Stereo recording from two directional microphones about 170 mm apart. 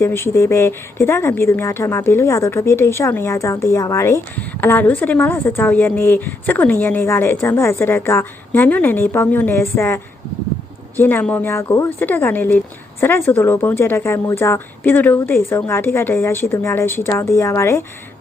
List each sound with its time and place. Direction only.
0.0 s a woman's voice: 15° left (ahead or behind)